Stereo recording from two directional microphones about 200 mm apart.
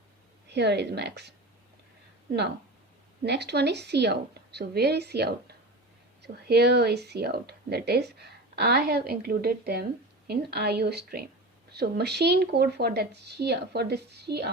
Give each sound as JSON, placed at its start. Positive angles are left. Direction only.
{"t": 0.5, "sound": "speech", "side_deg": -55}
{"t": 3.2, "sound": "a woman's voice", "side_deg": -55}